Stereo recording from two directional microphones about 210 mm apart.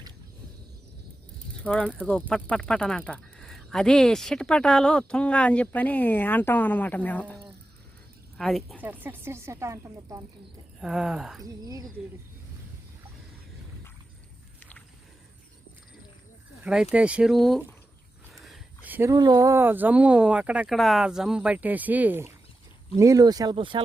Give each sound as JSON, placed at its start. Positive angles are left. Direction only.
{"t": 1.6, "sound": "speech", "side_deg": 5}
{"t": 1.9, "sound": "speech", "side_deg": -5}
{"t": 2.1, "sound": "speech", "side_deg": 5}
{"t": 8.4, "sound": "speech", "side_deg": 0}
{"t": 8.9, "sound": "speech", "side_deg": -10}
{"t": 10.8, "sound": "speech", "side_deg": 0}
{"t": 11.4, "sound": "speech", "side_deg": -15}
{"t": 16.6, "sound": "speech", "side_deg": -5}
{"t": 18.3, "sound": "a sound", "side_deg": 0}
{"t": 19.1, "sound": "speech", "side_deg": -20}